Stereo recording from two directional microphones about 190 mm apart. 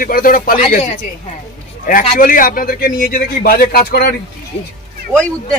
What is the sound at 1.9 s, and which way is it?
A man's voice, 45° left (ahead or behind).